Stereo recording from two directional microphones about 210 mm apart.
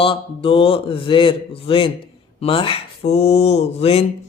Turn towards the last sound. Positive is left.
turn(degrees=30)  # may be behind; listen again after turning